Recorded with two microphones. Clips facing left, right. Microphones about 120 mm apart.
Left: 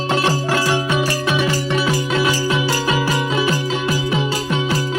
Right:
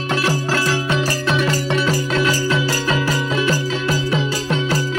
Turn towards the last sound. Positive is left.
turn(degrees=15)  # may be behind; listen again after turning